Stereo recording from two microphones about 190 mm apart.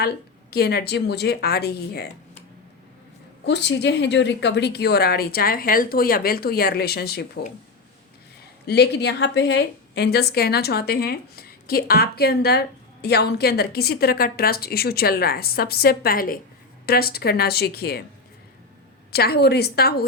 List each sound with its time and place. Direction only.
0.5 s a woman's voice: 55° left (ahead or behind)
3.4 s a woman's voice: 65° left (ahead or behind)
8.6 s a woman's voice: 60° left (ahead or behind)
19.1 s a woman's voice: 55° left (ahead or behind)